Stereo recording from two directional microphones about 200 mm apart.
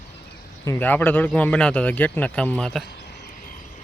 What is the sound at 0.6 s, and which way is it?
A man's voice, 10° left (ahead or behind).